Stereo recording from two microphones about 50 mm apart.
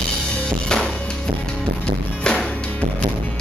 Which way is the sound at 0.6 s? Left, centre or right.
Centre.